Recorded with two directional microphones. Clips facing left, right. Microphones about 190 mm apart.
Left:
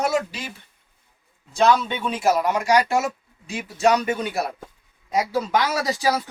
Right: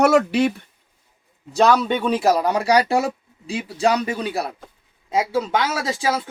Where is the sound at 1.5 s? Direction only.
40° right (ahead or behind).